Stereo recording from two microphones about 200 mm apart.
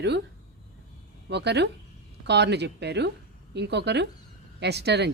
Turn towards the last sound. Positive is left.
turn(degrees=-55)  # may be behind; listen again after turning